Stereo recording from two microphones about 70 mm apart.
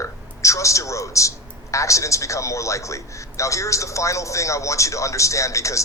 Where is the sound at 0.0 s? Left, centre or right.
Left.